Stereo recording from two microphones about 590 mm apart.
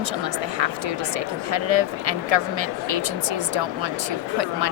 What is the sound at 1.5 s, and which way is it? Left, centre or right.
Speech, right.